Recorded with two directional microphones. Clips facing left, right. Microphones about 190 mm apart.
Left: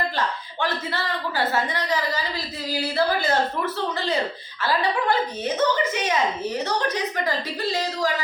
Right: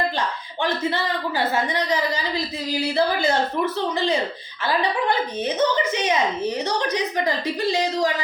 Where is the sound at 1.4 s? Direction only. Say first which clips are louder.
Right 1 dB; 15° right (ahead or behind).